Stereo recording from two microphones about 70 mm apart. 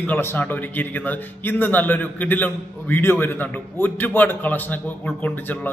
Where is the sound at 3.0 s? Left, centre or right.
Left.